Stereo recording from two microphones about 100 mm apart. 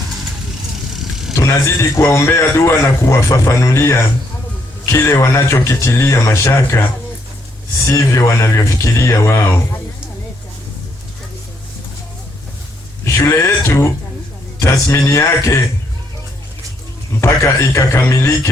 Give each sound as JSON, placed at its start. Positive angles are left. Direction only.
{"t": 0.9, "sound": "vehicle", "side_deg": -5}
{"t": 1.4, "sound": "a man's voice", "side_deg": 30}
{"t": 13.1, "sound": "speech", "side_deg": 30}
{"t": 17.2, "sound": "a man's voice", "side_deg": 30}